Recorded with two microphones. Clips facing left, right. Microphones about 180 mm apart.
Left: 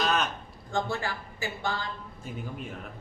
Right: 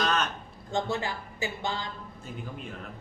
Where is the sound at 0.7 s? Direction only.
20° right (ahead or behind).